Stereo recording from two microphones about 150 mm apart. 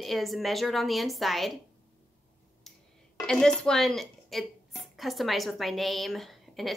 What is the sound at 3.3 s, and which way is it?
Speech, 5° left (ahead or behind).